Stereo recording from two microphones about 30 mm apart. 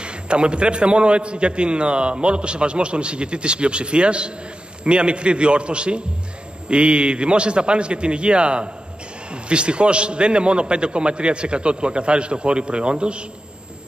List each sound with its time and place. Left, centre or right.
0.0 s a man's voice: right